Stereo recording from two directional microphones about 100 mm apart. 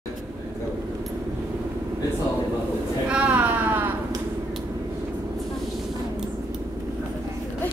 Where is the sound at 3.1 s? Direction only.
10° right (ahead or behind).